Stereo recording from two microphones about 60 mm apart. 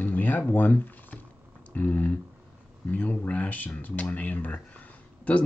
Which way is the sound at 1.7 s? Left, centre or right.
Left.